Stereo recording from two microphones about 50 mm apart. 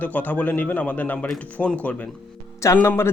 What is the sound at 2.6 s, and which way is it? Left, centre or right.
Speech, left.